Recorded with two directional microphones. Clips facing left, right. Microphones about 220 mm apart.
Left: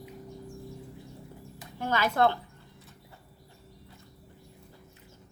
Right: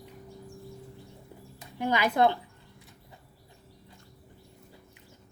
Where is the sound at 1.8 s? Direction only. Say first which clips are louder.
Right 1 dB; 15° right (ahead or behind).